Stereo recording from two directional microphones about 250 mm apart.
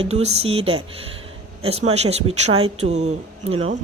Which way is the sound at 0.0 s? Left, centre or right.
Right.